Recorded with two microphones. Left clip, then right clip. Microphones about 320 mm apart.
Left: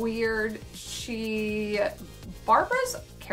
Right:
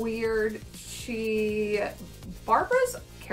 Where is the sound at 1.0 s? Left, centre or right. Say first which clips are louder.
Right 4 dB; centre.